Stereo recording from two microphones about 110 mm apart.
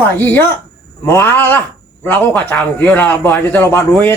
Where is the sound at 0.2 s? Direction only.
15° left (ahead or behind).